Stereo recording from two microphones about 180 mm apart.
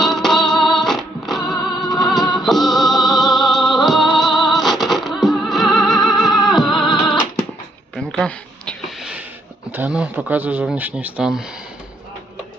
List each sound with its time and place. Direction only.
0.0 s music: centre (ahead or behind)
7.9 s a sound: centre (ahead or behind)
9.7 s speech: 5° right (ahead or behind)